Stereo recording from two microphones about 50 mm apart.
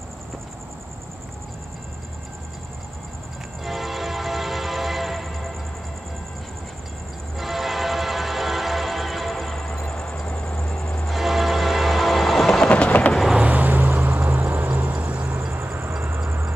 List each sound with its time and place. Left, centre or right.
3.6 s train: centre
7.3 s train: centre
9.6 s vehicle: left
11.1 s train: centre
12.6 s train: left
13.4 s vehicle: right